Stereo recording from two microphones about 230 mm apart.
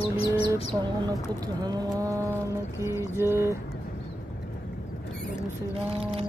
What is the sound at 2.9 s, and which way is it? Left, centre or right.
Mantra, centre.